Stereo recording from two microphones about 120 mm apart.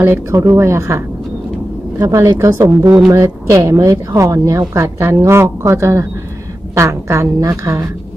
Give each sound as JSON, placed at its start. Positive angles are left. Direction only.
{"t": 0.0, "sound": "speech", "side_deg": -20}